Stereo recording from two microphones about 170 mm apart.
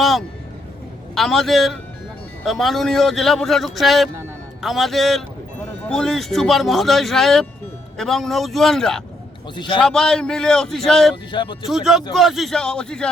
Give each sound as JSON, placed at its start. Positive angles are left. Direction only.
{"t": 0.0, "sound": "a sound", "side_deg": 0}
{"t": 1.1, "sound": "a man's voice", "side_deg": 0}
{"t": 9.6, "sound": "a man's voice", "side_deg": 30}
{"t": 9.8, "sound": "a man's voice", "side_deg": 5}
{"t": 11.3, "sound": "a man's voice", "side_deg": 30}
{"t": 11.6, "sound": "a man's voice", "side_deg": 0}